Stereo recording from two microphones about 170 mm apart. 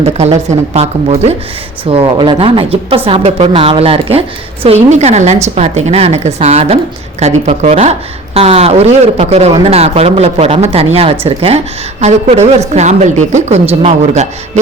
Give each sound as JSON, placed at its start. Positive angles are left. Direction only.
{"t": 0.0, "sound": "speech", "side_deg": -40}